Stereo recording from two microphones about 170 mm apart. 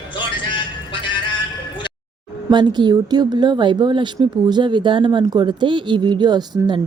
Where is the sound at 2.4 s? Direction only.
25° right (ahead or behind).